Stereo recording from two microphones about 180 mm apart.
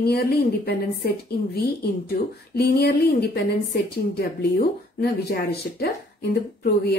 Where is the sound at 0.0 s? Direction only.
60° left (ahead or behind).